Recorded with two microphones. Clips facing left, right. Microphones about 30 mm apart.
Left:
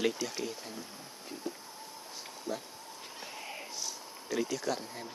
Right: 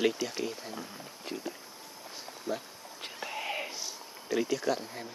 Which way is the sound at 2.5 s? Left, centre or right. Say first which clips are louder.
Right 3 dB; centre.